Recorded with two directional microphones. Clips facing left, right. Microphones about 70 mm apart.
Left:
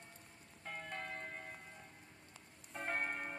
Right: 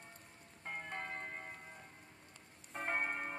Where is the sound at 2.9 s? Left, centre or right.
Right.